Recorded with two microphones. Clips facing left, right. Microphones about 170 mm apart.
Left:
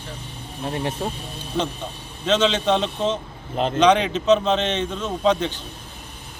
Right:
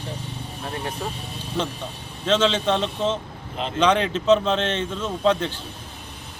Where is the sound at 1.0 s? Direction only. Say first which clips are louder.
Left 3 dB; 30° left (ahead or behind).